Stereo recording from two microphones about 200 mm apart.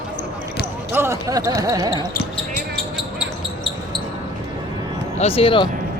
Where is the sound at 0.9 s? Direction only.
15° right (ahead or behind).